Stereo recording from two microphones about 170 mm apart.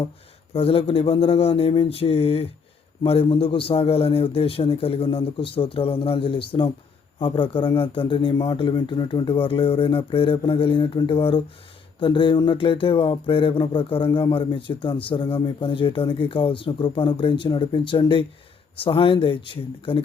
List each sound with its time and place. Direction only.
0.5 s a man's voice: 35° left (ahead or behind)